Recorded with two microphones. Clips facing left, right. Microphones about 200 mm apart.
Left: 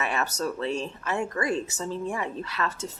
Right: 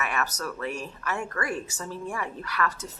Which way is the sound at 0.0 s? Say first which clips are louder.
Left 2 dB; 25° left (ahead or behind).